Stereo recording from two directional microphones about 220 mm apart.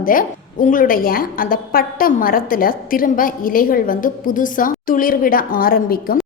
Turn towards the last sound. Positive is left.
turn(degrees=40)  # may be behind; listen again after turning